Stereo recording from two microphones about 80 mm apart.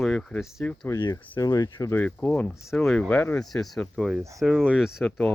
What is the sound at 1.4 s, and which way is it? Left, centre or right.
Speech, left.